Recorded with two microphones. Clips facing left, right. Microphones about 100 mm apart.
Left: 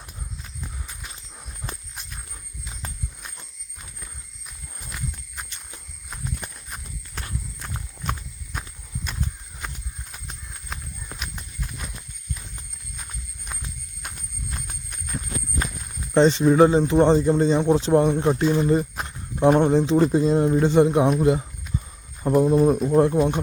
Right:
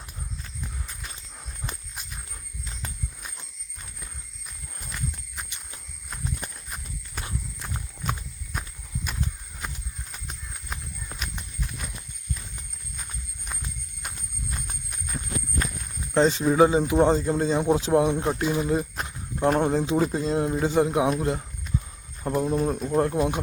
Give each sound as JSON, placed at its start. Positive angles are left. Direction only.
{"t": 0.9, "sound": "a sound", "side_deg": 5}
{"t": 1.7, "sound": "walk", "side_deg": 0}
{"t": 4.8, "sound": "horse", "side_deg": 0}
{"t": 9.6, "sound": "horse", "side_deg": 0}
{"t": 11.2, "sound": "clip-clop", "side_deg": 0}
{"t": 13.0, "sound": "horse", "side_deg": 0}
{"t": 14.8, "sound": "a sound", "side_deg": -5}
{"t": 16.1, "sound": "speech", "side_deg": 0}